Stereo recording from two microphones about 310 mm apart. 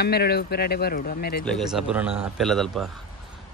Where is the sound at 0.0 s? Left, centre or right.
Left.